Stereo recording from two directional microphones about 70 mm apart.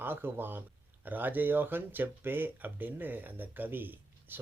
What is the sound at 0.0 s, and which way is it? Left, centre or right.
Speech, right.